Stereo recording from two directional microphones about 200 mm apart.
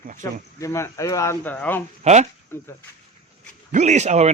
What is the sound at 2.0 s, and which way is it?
Speech, 35° right (ahead or behind).